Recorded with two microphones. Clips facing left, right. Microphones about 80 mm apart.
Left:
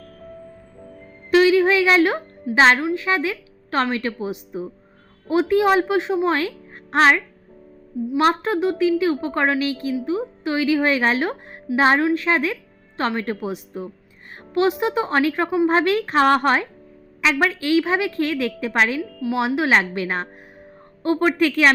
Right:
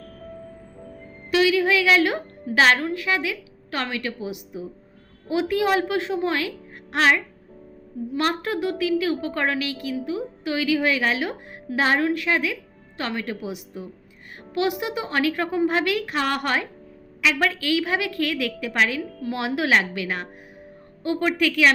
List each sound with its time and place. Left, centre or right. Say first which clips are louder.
1.3 s a woman's voice: left 4 dB; left
8.2 s a woman's voice: left 5 dB; left
15.6 s a woman's voice: left 5 dB; left